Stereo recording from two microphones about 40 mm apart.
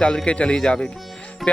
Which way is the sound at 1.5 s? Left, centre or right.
Left.